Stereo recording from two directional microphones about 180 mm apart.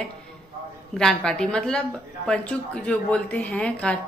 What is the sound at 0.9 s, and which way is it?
A woman's voice, 5° left (ahead or behind).